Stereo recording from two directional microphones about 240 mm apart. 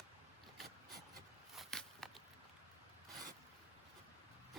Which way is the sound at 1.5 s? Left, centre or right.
Centre.